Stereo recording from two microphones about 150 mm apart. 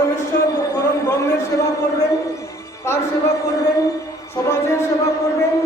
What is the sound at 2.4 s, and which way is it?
Music, 20° left (ahead or behind).